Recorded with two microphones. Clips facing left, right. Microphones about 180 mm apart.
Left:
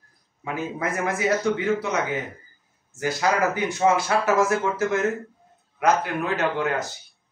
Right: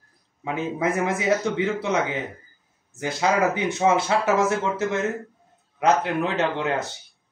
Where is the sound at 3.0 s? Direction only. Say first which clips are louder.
Right 1 dB; 20° right (ahead or behind).